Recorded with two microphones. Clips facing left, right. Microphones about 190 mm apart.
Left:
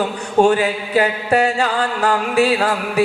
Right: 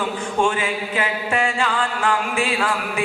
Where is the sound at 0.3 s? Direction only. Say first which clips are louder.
Left 8 dB; 40° left (ahead or behind).